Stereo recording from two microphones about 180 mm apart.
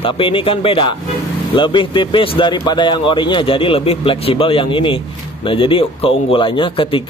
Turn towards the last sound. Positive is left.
turn(degrees=30)  # may be behind; listen again after turning